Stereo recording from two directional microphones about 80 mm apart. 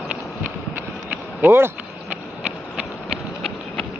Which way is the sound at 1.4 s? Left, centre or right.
Right.